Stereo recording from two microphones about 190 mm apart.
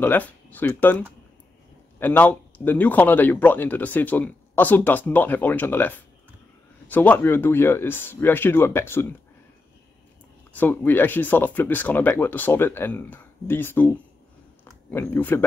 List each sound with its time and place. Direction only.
0.0 s speech: 10° left (ahead or behind)
10.5 s speech: 10° left (ahead or behind)
14.6 s a sound: 10° left (ahead or behind)